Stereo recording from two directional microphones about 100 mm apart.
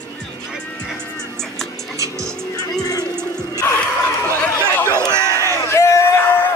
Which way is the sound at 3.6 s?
20° left (ahead or behind).